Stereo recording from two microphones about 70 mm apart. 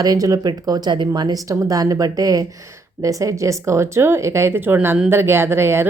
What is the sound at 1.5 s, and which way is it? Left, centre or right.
Speech, right.